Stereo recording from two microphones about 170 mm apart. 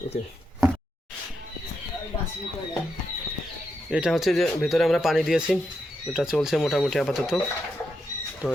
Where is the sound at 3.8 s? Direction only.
5° right (ahead or behind).